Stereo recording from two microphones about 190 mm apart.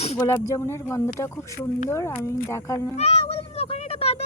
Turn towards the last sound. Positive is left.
turn(degrees=30)  # may be behind; listen again after turning